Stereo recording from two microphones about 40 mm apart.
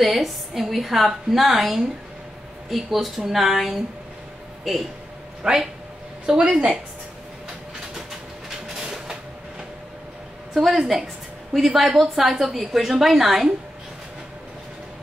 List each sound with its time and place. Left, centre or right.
0.0 s a woman's voice: centre
5.4 s a man's voice: centre
8.7 s train: centre
10.5 s a woman's voice: centre